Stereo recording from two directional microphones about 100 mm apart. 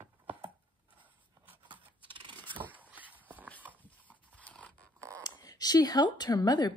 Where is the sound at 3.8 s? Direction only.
15° left (ahead or behind).